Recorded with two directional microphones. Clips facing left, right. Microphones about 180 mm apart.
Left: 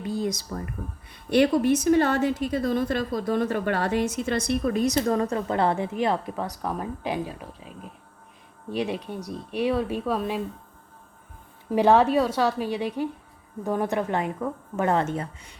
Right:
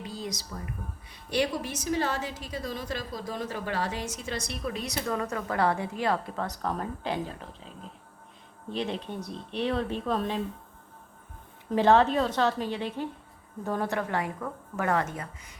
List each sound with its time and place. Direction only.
0.0 s a sound: 55° left (ahead or behind)
1.1 s a woman's voice: 55° left (ahead or behind); by 10.4 s 10° left (ahead or behind)
11.7 s speech: 15° left (ahead or behind); by 15.5 s 30° left (ahead or behind)